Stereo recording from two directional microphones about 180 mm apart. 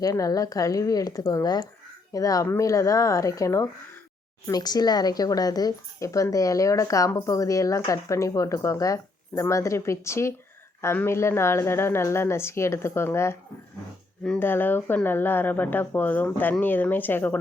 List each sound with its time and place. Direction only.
0.0 s a woman's voice: 20° left (ahead or behind)